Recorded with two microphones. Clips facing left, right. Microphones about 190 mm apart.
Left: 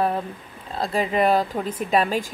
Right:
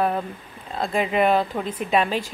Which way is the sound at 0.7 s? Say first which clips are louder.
Even; 35° left (ahead or behind).